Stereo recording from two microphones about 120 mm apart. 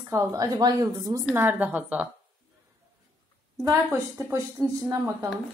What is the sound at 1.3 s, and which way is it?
Speech, 15° right (ahead or behind).